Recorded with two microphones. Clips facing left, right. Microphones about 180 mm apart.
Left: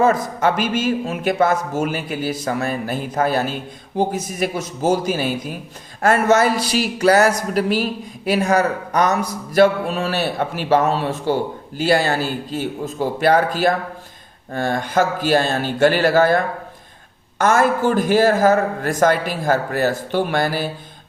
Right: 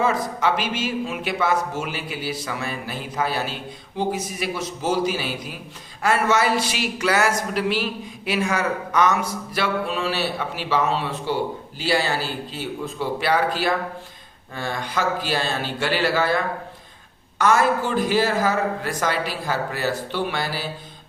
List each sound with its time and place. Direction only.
0.0 s speech: 45° left (ahead or behind)
6.0 s a sound: 45° left (ahead or behind)
9.5 s speech: 45° left (ahead or behind)